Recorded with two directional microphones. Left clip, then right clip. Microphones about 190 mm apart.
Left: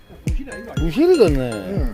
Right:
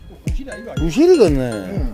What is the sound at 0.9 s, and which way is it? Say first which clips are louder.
Speech: right 2 dB; 15° right (ahead or behind).